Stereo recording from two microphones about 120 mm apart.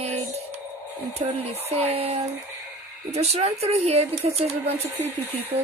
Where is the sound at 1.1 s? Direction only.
60° right (ahead or behind).